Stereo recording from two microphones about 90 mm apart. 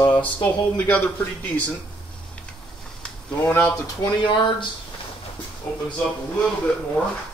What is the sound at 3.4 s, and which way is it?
Speech, 25° left (ahead or behind).